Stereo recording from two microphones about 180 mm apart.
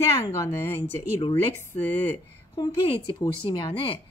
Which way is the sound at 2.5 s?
20° left (ahead or behind).